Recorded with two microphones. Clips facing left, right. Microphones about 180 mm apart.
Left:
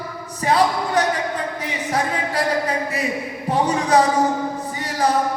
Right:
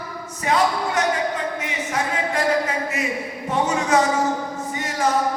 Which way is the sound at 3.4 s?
35° left (ahead or behind).